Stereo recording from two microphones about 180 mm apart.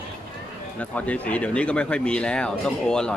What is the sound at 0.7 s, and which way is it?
Speech, 5° left (ahead or behind).